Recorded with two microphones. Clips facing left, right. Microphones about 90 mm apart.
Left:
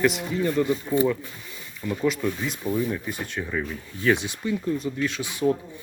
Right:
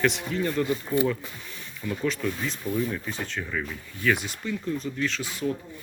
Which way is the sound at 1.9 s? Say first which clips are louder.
Left 3 dB; 10° left (ahead or behind).